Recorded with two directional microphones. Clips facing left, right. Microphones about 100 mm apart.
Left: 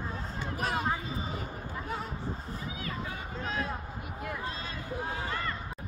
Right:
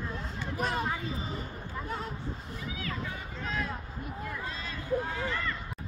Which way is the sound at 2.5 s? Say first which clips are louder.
Even; 30° left (ahead or behind).